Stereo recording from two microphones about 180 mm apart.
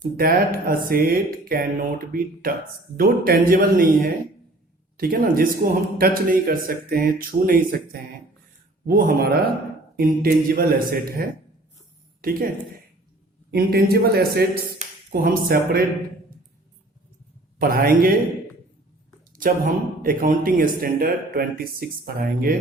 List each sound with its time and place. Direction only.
0.0 s speech: 55° right (ahead or behind)
8.9 s a woman's voice: 55° right (ahead or behind)
13.5 s speech: 55° right (ahead or behind)
17.6 s speech: 55° right (ahead or behind)
19.4 s speech: 50° right (ahead or behind)